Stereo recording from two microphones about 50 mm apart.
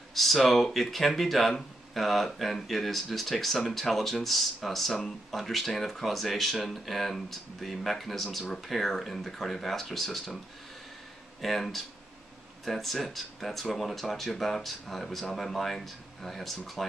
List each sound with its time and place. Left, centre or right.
0.1 s speech: centre
11.4 s speech: centre